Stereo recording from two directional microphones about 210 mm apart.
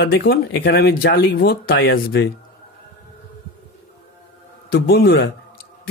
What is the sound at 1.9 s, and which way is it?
Speech, 65° left (ahead or behind).